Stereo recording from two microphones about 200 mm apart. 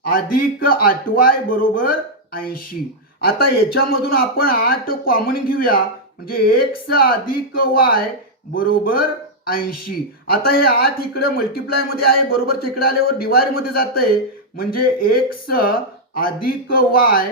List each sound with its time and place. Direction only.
0.1 s speech: 45° left (ahead or behind)